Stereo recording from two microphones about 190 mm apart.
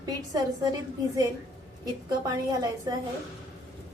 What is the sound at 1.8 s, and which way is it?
A woman's voice, 20° right (ahead or behind).